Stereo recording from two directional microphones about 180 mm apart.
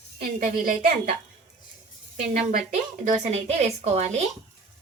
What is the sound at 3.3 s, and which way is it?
Speech, 35° right (ahead or behind).